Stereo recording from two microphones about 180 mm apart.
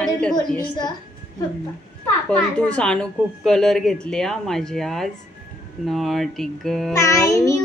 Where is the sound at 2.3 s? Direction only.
5° left (ahead or behind).